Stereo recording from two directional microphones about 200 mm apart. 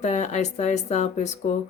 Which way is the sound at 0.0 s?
35° left (ahead or behind).